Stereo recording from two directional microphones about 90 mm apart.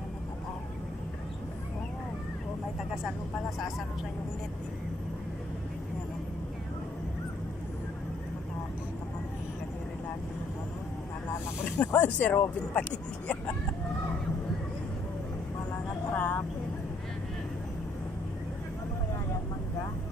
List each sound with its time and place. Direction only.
3.0 s speech: centre (ahead or behind)
11.6 s speech: 20° left (ahead or behind)
16.1 s vehicle: 20° left (ahead or behind)